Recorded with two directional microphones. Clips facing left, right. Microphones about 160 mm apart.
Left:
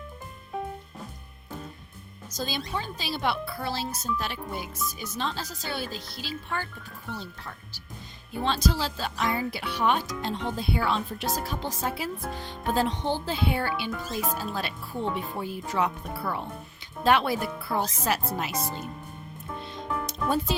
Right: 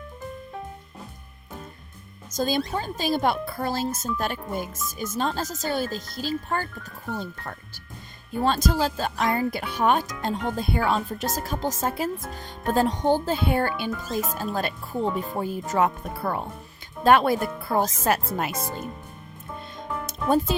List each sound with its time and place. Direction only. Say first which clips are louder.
2.3 s speech: right 7 dB; 50° right (ahead or behind)